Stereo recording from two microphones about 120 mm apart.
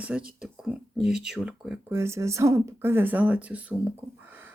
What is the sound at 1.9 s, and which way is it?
Speech, 25° right (ahead or behind).